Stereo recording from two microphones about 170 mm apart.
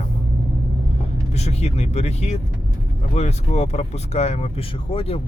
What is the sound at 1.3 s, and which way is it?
Speech, 40° left (ahead or behind).